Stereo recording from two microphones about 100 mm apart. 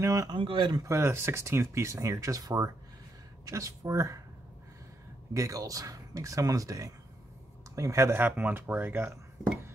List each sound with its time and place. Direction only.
0.0 s speech: 30° right (ahead or behind)
0.3 s speech: 55° right (ahead or behind)
0.7 s speech: 30° right (ahead or behind)
5.3 s speech: 35° right (ahead or behind)